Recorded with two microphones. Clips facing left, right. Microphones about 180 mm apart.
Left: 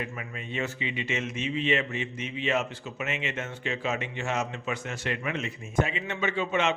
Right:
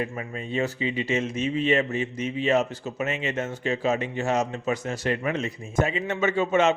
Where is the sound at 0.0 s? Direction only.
35° right (ahead or behind).